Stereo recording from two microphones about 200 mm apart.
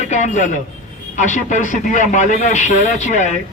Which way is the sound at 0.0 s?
35° left (ahead or behind).